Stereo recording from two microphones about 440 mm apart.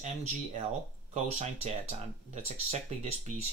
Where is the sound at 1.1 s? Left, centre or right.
Centre.